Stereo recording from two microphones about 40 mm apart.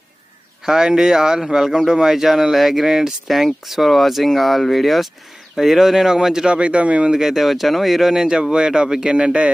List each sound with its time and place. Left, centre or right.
0.7 s speech: centre
6.5 s speech: right
7.1 s speech: centre
7.3 s speech: centre
9.2 s speech: right